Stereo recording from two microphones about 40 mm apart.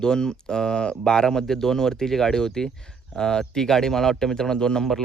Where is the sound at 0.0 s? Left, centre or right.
Centre.